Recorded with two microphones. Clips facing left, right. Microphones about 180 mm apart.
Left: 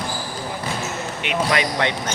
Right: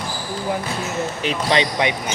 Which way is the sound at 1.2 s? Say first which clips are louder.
Right 1 dB; 25° right (ahead or behind).